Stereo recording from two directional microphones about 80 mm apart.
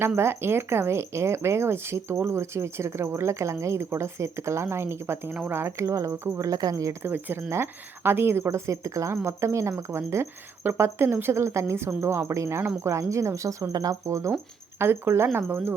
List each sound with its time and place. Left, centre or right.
0.2 s speech: right
7.0 s speech: right
14.8 s speech: right